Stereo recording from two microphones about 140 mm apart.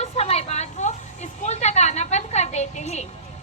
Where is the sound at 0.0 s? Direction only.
50° left (ahead or behind).